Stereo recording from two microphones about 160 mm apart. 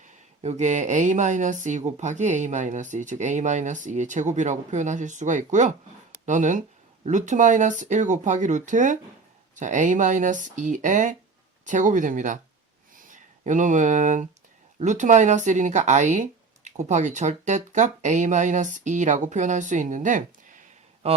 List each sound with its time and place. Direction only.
0.0 s speech: 45° right (ahead or behind)